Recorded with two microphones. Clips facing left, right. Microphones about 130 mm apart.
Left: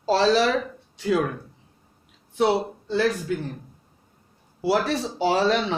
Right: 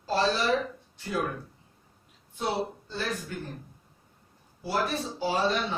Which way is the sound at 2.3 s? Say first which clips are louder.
Left 9 dB; 90° left.